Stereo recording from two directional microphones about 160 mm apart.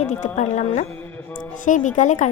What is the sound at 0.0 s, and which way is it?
A woman's voice, 50° left (ahead or behind).